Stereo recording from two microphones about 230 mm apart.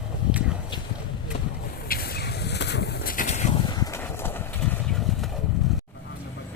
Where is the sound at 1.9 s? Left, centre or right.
Left; by 4.3 s centre.